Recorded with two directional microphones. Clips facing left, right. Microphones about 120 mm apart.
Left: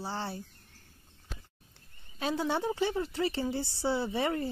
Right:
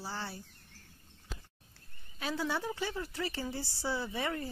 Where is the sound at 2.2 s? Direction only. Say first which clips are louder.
Left 4 dB; 25° left (ahead or behind).